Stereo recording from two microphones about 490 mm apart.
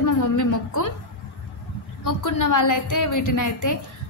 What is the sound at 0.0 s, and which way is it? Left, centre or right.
Speech, left.